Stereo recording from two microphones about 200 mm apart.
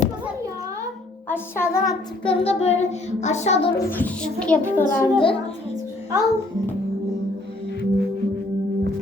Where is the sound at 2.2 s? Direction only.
30° left (ahead or behind).